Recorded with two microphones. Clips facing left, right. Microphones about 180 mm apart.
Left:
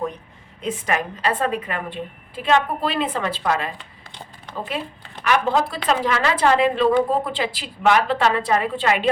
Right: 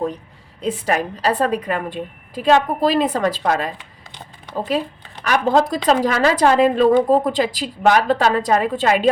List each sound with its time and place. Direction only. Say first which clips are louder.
0.6 s a woman's voice: right 4 dB; 35° right (ahead or behind)
5.2 s a woman's voice: right 3 dB; 40° right (ahead or behind)